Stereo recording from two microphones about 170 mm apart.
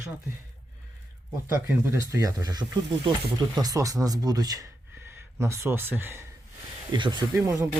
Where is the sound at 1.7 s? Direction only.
15° right (ahead or behind).